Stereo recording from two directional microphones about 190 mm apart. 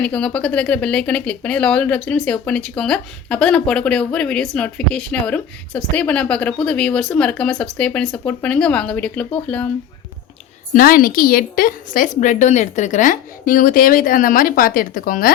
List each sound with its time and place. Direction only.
0.0 s speech: 5° left (ahead or behind)
10.8 s a woman's voice: 50° left (ahead or behind)